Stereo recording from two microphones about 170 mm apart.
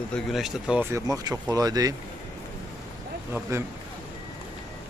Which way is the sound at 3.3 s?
15° right (ahead or behind).